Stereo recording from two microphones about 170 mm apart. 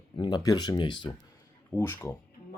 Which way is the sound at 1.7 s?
10° left (ahead or behind).